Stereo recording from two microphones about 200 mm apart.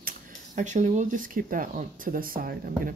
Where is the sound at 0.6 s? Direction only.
40° right (ahead or behind).